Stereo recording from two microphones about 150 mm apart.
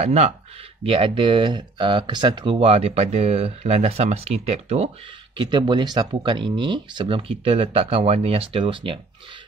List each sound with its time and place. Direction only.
0.0 s speech: 50° right (ahead or behind)
0.8 s speech: 35° right (ahead or behind)
5.4 s speech: 30° right (ahead or behind)